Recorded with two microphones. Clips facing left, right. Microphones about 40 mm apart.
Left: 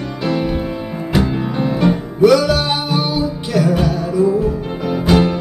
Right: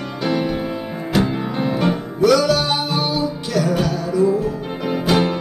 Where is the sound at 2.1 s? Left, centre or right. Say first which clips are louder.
Left 3 dB; centre.